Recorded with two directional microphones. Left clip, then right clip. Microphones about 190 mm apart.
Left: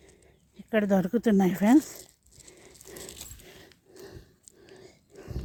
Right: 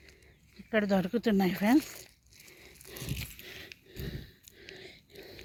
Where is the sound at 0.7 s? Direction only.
25° left (ahead or behind).